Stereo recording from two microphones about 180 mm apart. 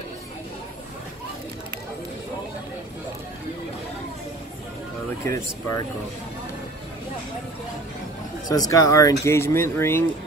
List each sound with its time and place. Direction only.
5.2 s speech: 15° left (ahead or behind)
8.5 s speech: 20° left (ahead or behind)